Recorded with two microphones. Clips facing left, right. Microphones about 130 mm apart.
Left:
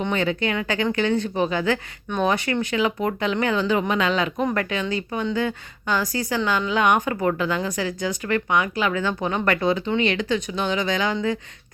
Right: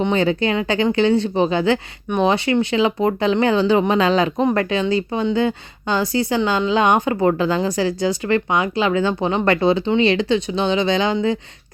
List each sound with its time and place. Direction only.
0.0 s speech: 30° right (ahead or behind)